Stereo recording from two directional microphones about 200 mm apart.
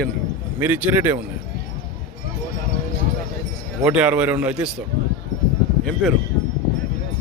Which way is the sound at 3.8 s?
5° right (ahead or behind).